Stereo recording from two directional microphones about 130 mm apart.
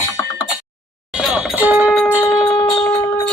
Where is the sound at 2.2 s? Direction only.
25° left (ahead or behind).